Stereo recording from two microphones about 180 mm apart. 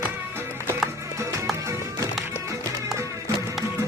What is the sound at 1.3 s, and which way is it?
Music, 15° right (ahead or behind).